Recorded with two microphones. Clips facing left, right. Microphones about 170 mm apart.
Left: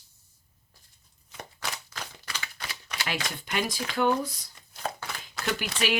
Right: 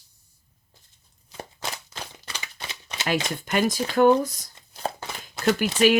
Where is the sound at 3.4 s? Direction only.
45° right (ahead or behind).